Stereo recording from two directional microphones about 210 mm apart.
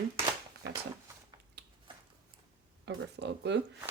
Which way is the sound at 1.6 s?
55° right (ahead or behind).